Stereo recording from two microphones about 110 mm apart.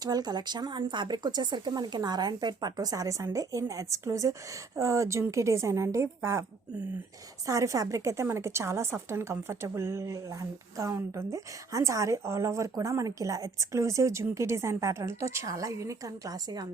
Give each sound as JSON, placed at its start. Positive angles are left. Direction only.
{"t": 0.0, "sound": "a woman's voice", "side_deg": -40}
{"t": 7.4, "sound": "a woman's voice", "side_deg": -30}